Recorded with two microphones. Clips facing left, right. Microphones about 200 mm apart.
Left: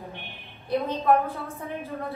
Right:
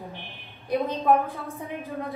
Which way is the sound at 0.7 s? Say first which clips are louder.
Even; 15° right (ahead or behind).